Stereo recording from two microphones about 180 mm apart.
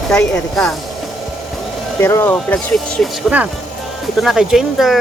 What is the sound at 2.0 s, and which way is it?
Speech, 15° left (ahead or behind).